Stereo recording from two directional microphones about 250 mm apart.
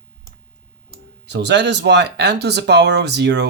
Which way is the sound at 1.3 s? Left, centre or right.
Right.